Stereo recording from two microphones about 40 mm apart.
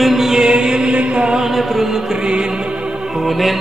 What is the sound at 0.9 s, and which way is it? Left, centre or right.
Chant, right.